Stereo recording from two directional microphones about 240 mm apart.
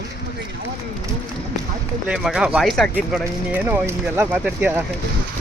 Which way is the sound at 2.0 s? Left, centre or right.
Centre.